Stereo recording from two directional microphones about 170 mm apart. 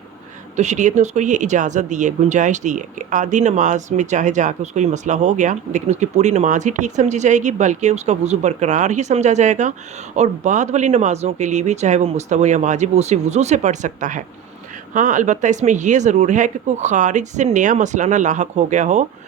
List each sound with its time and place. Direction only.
0.5 s speech: 45° right (ahead or behind)